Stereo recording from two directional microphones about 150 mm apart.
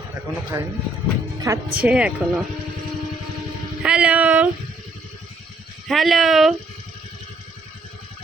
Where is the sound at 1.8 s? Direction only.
10° right (ahead or behind).